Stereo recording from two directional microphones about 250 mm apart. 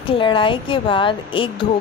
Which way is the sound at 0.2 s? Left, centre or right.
Centre.